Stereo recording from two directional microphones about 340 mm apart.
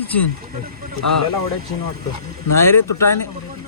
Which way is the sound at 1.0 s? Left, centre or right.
Left.